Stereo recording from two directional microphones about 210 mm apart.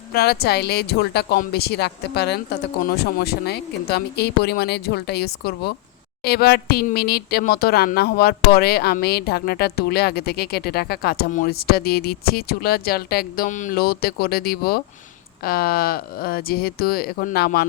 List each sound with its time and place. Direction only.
0.1 s speech: 45° left (ahead or behind)